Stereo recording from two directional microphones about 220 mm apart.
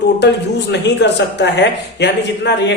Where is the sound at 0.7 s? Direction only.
50° left (ahead or behind).